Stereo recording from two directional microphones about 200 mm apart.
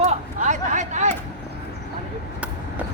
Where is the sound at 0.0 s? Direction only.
35° right (ahead or behind).